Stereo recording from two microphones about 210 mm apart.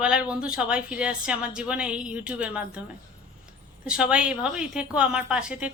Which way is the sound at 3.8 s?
5° right (ahead or behind).